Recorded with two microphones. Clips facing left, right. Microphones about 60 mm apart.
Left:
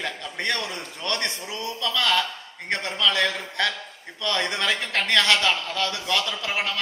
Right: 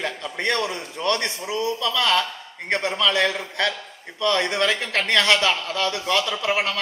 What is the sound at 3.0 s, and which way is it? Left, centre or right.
A man's voice, centre.